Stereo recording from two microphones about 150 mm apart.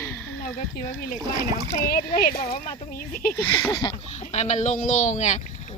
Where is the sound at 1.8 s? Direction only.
85° left; by 3.3 s 70° left (ahead or behind).